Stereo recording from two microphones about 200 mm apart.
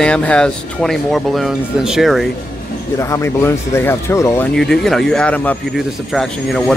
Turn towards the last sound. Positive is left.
turn(degrees=0)  # may be behind; listen again after turning